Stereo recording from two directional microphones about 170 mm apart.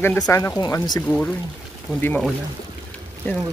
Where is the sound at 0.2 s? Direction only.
20° left (ahead or behind).